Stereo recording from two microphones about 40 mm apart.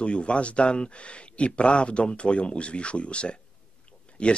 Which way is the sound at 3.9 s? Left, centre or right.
Left.